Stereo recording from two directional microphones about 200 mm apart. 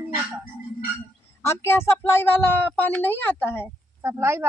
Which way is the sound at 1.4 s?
10° left (ahead or behind).